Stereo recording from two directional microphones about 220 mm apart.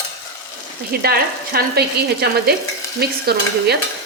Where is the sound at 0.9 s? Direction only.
45° right (ahead or behind).